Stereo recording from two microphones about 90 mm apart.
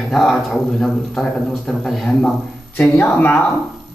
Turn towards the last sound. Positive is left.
turn(degrees=20)  # may be behind; listen again after turning